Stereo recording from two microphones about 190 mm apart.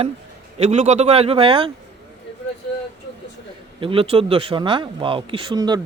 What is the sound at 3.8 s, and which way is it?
Speech, 30° right (ahead or behind).